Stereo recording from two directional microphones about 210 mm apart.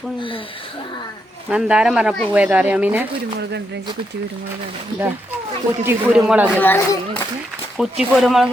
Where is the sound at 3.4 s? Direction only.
50° right (ahead or behind).